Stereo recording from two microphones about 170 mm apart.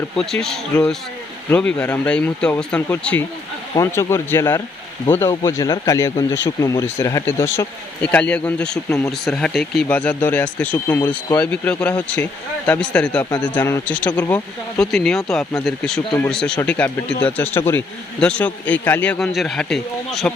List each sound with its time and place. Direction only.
0.2 s a man's voice: 5° left (ahead or behind)